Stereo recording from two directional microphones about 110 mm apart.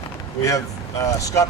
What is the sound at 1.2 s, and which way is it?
Speech, 30° left (ahead or behind).